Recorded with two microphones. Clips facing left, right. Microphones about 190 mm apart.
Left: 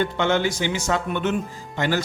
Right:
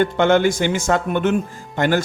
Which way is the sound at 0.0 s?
50° right (ahead or behind).